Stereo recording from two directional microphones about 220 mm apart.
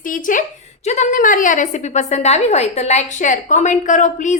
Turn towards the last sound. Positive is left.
turn(degrees=35)  # may be behind; listen again after turning